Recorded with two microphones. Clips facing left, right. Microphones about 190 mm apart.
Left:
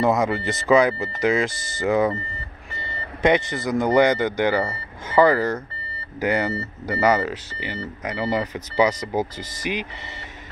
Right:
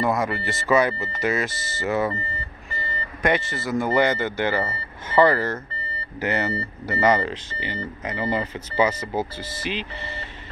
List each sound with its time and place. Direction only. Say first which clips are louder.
0.0 s speech: left 3 dB; 20° left (ahead or behind)